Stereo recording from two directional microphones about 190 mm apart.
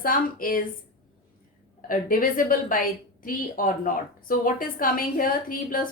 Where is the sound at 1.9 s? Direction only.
45° left (ahead or behind).